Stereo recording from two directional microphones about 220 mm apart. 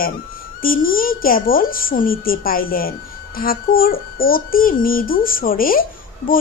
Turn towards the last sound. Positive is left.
turn(degrees=40)  # may be behind; listen again after turning